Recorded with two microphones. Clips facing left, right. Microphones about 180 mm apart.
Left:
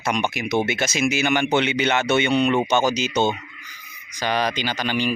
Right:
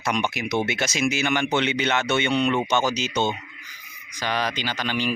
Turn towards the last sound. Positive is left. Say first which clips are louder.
# left 3 dB
turn(degrees=5)  # may be behind; listen again after turning